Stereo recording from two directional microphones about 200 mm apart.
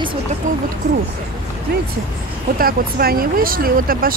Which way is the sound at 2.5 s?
50° right (ahead or behind).